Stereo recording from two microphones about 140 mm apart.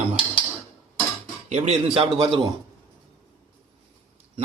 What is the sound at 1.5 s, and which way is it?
Speech, 45° right (ahead or behind).